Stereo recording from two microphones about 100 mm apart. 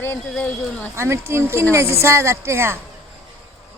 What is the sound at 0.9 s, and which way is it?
Speech, 25° right (ahead or behind).